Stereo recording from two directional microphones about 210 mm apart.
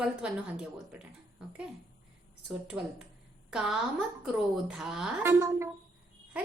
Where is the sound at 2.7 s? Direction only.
Centre (ahead or behind).